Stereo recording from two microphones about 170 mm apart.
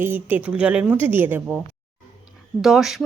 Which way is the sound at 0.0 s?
10° right (ahead or behind).